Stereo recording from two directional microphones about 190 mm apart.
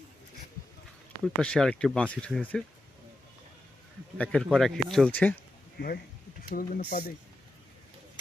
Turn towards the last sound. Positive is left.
turn(degrees=50)  # may be behind; listen again after turning